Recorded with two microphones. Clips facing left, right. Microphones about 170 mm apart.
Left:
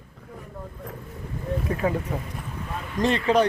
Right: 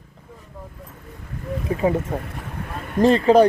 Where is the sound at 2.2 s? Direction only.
60° right (ahead or behind).